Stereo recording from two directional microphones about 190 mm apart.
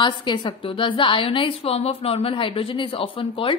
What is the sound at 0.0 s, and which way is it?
A woman's voice, 25° left (ahead or behind).